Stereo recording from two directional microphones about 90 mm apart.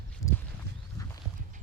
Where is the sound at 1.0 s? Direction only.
40° left (ahead or behind).